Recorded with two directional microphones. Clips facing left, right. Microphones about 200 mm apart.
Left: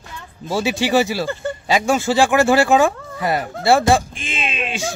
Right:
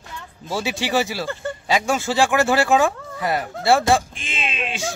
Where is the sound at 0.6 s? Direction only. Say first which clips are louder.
Left 5 dB; 5° left (ahead or behind).